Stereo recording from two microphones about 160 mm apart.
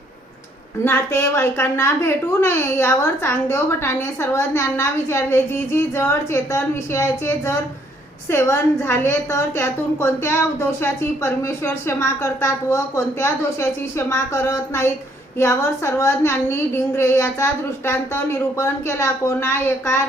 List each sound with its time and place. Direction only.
0.9 s a woman's voice: 15° left (ahead or behind)